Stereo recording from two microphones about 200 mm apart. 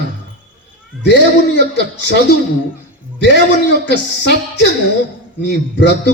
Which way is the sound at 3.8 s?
60° left (ahead or behind).